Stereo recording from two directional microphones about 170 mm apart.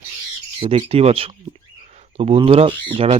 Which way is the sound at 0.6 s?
35° right (ahead or behind).